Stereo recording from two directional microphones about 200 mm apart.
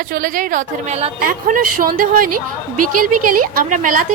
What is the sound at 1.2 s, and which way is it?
A woman's voice, 45° right (ahead or behind).